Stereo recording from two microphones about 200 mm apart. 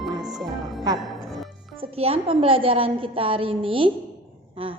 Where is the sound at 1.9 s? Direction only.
30° right (ahead or behind).